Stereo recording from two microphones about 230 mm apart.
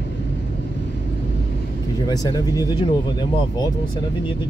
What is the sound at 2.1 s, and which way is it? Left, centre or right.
Speech, centre.